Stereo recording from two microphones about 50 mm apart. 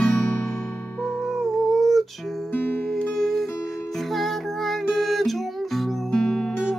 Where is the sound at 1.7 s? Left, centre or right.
Centre.